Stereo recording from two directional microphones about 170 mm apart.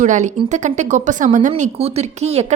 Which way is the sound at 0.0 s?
45° right (ahead or behind).